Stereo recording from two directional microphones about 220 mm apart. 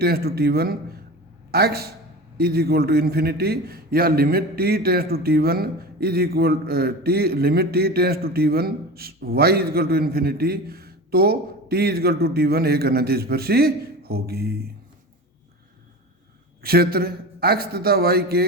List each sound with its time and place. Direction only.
0.0 s a man's voice: 45° right (ahead or behind)
16.6 s a man's voice: 45° right (ahead or behind)